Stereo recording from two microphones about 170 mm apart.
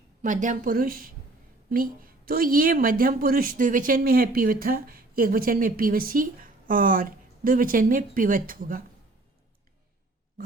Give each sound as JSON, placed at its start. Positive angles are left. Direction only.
{"t": 0.2, "sound": "a woman's voice", "side_deg": -50}